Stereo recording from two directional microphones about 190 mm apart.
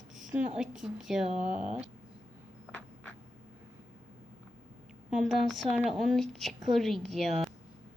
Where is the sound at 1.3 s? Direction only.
35° right (ahead or behind).